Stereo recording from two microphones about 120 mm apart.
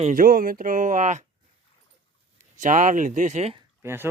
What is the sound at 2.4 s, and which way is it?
Speech, 90° right.